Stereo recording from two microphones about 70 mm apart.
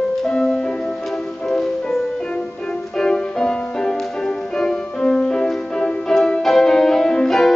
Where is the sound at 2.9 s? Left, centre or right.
Centre.